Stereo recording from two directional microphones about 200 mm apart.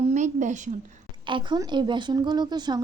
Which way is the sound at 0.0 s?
35° right (ahead or behind).